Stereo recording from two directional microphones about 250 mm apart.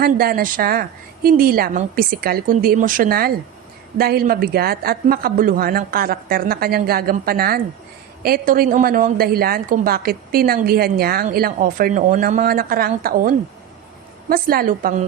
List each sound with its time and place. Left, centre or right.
0.0 s a woman's voice: right